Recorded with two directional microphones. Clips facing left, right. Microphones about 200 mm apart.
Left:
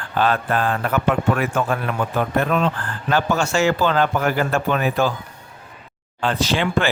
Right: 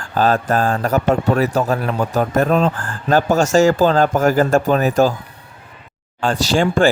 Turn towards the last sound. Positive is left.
turn(degrees=-45)  # may be behind; listen again after turning